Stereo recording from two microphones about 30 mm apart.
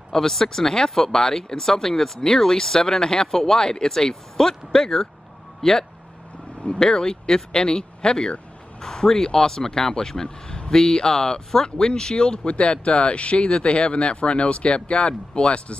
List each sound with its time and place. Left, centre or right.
0.1 s speech: centre
6.6 s speech: left
12.4 s speech: left